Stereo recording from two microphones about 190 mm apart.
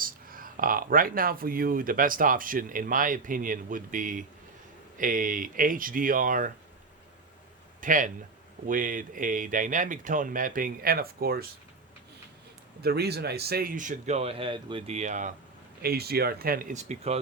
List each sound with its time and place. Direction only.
0.0 s speech: 50° right (ahead or behind)
7.8 s speech: 45° right (ahead or behind)
12.8 s speech: 55° right (ahead or behind); by 15.3 s 40° right (ahead or behind)
15.8 s speech: 55° right (ahead or behind); by 17.2 s 35° right (ahead or behind)